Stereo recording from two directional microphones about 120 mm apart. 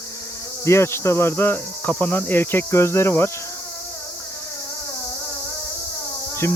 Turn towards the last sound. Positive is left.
turn(degrees=20)  # may be behind; listen again after turning